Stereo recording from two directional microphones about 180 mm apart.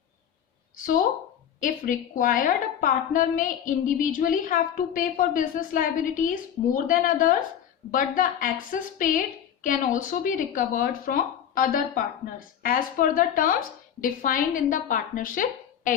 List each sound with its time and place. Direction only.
1.6 s a woman's voice: 45° left (ahead or behind)